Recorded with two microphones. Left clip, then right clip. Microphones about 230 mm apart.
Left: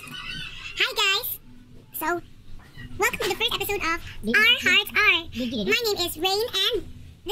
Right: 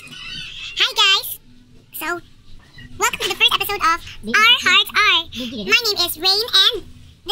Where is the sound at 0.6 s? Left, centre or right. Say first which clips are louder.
Right 7 dB; centre.